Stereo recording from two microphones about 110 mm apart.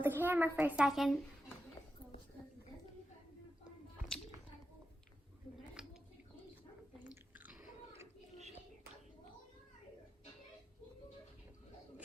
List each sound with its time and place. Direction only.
0.0 s a woman's voice: 20° right (ahead or behind)
0.9 s speech: centre (ahead or behind)
7.0 s chewing: 15° right (ahead or behind)